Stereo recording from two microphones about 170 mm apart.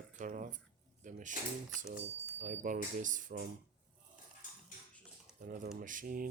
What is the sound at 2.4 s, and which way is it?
Speech, 50° right (ahead or behind).